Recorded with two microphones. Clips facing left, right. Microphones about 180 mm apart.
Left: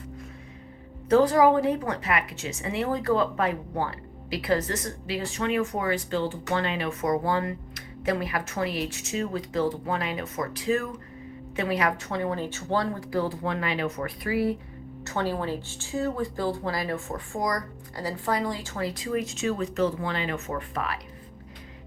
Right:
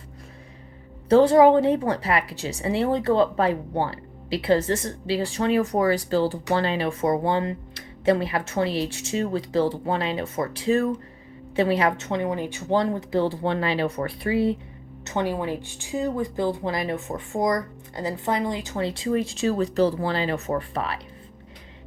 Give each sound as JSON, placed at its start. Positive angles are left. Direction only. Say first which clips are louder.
{"t": 1.1, "sound": "speech", "louder": "right 4 dB", "side_deg": -25}